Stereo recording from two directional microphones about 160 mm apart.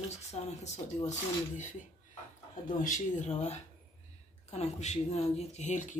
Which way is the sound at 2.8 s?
50° left (ahead or behind).